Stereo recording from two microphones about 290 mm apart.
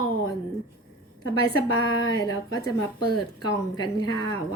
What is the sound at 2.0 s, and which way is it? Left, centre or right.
Speech, centre.